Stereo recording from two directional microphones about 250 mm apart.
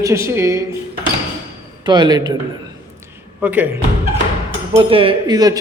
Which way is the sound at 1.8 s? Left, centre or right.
Centre.